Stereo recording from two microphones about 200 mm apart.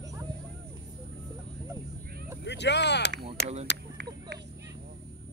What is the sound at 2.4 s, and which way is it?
Speech, 60° left (ahead or behind).